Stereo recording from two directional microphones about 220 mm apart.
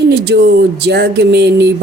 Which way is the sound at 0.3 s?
50° right (ahead or behind).